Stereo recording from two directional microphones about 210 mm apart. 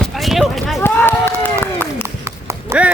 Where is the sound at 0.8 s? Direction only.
10° left (ahead or behind).